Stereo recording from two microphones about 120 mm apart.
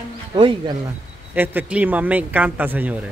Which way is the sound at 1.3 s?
15° right (ahead or behind).